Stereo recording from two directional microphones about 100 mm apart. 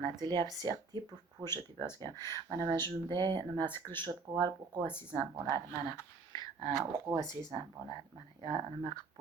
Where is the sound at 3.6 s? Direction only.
20° left (ahead or behind).